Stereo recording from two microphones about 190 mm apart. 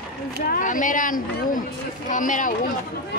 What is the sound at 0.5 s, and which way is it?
Speech, 45° left (ahead or behind).